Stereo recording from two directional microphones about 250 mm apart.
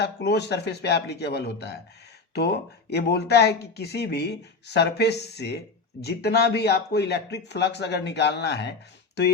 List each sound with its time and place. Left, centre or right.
0.0 s speech: left